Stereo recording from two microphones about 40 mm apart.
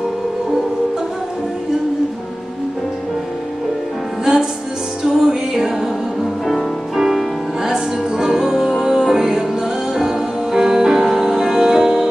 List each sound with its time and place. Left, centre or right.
4.2 s music: centre
7.0 s music: centre